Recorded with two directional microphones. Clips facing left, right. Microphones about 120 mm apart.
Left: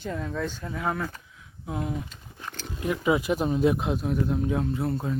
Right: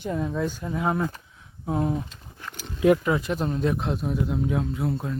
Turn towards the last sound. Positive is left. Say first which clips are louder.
# even
turn(degrees=0)  # may be behind; listen again after turning